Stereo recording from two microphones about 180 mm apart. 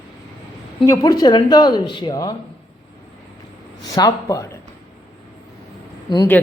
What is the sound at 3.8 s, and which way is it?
Speech, 20° left (ahead or behind).